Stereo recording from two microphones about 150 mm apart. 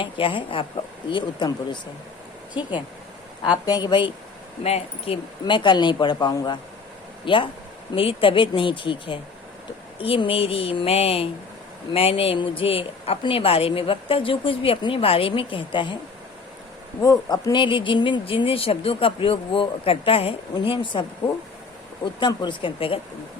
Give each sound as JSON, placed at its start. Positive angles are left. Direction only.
{"t": 0.0, "sound": "speech", "side_deg": 35}
{"t": 4.6, "sound": "speech", "side_deg": 40}
{"t": 17.0, "sound": "speech", "side_deg": 25}